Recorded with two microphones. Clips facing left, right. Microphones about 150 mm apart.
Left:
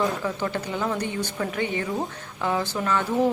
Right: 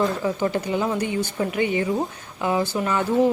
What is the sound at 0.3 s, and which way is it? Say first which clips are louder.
Speech: right 5 dB; 15° right (ahead or behind).